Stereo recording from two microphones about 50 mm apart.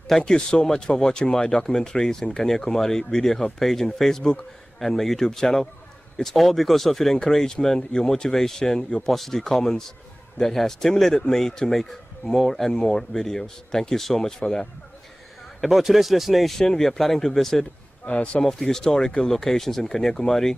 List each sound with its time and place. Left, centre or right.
0.1 s a man's voice: centre
15.6 s a man's voice: centre
18.0 s speech: left
18.4 s speech: centre